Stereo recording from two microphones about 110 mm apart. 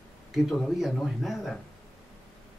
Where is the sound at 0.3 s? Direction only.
Centre (ahead or behind).